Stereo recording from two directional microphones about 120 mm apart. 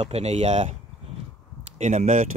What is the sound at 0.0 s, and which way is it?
Speech, 65° right (ahead or behind).